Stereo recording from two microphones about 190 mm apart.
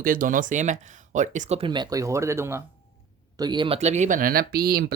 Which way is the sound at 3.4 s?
25° right (ahead or behind).